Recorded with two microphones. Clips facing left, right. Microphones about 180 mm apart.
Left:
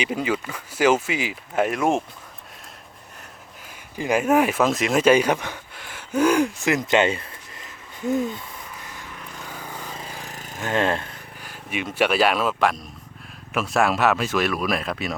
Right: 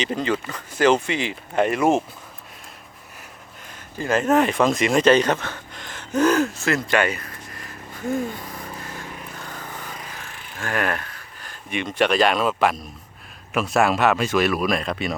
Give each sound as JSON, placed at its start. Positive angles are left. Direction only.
{"t": 0.0, "sound": "speech", "side_deg": 10}
{"t": 3.9, "sound": "speech", "side_deg": 15}
{"t": 9.4, "sound": "vehicle", "side_deg": 10}
{"t": 10.2, "sound": "a sound", "side_deg": 40}
{"t": 10.6, "sound": "speech", "side_deg": 25}
{"t": 11.3, "sound": "speech", "side_deg": 10}